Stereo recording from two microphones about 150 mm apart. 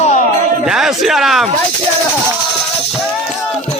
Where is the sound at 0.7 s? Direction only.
5° right (ahead or behind).